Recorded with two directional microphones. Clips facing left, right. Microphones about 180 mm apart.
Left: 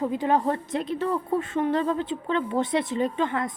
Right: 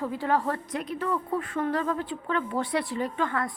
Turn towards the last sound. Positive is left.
turn(degrees=20)  # may be behind; listen again after turning